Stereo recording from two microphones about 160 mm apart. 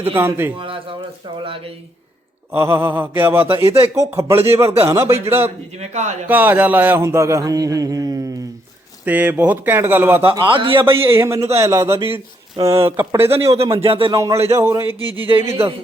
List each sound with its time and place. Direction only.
0.2 s speech: 15° right (ahead or behind)
0.6 s a sound: 35° right (ahead or behind)
2.5 s speech: 15° right (ahead or behind)
5.7 s a man's voice: 45° right (ahead or behind)
6.2 s speech: 10° right (ahead or behind)
9.0 s speech: 10° right (ahead or behind)
10.3 s speech: 30° right (ahead or behind)
11.0 s speech: 15° right (ahead or behind)
13.2 s speech: 40° right (ahead or behind)
14.2 s speech: 15° right (ahead or behind)
14.8 s speech: 25° left (ahead or behind)
15.4 s speech: 15° right (ahead or behind)